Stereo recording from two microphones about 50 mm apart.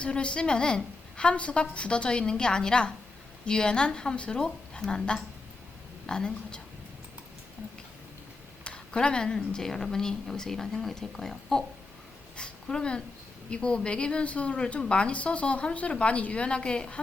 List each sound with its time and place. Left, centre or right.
0.0 s a woman's voice: left
8.6 s a woman's voice: centre